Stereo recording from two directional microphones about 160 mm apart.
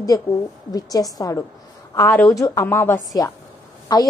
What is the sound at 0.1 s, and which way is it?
A woman's voice, 20° left (ahead or behind).